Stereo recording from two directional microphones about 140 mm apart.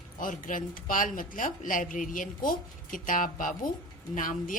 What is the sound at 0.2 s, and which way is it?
Speech, 75° left (ahead or behind).